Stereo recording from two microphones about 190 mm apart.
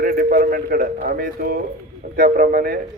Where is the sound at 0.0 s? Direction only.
55° right (ahead or behind).